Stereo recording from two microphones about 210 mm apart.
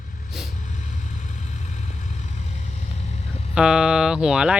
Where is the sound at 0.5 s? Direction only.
35° left (ahead or behind).